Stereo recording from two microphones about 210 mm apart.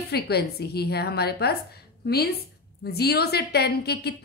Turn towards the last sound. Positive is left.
turn(degrees=50)  # may be behind; listen again after turning